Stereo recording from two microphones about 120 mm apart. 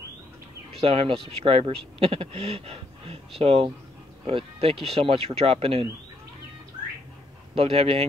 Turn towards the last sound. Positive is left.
turn(degrees=-55)  # may be behind; listen again after turning